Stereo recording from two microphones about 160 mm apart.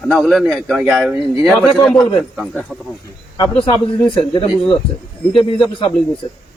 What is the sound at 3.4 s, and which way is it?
Speech, 30° left (ahead or behind).